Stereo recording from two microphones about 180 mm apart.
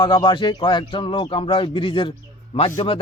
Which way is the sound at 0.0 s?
25° left (ahead or behind).